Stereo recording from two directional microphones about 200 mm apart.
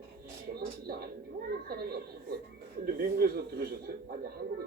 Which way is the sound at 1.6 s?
50° right (ahead or behind).